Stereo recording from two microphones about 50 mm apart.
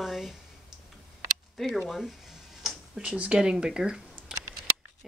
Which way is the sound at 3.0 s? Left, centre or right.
Centre.